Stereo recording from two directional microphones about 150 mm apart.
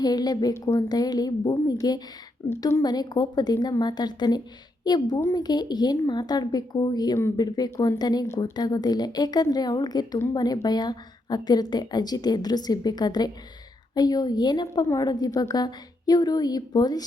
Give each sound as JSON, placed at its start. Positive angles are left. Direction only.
{"t": 0.0, "sound": "a woman's voice", "side_deg": 25}